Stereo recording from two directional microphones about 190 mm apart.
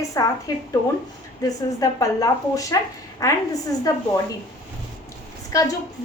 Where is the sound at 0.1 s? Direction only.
20° left (ahead or behind).